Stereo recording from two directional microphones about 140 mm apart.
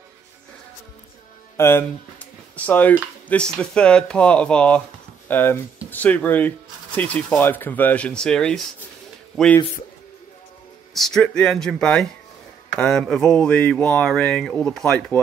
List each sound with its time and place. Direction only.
1.6 s speech: 15° left (ahead or behind)
10.9 s speech: centre (ahead or behind)